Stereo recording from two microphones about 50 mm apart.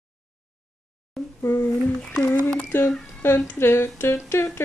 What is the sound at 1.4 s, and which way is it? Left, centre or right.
Speech, left.